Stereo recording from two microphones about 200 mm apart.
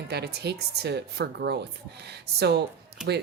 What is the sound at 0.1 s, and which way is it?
A woman's voice, 55° right (ahead or behind).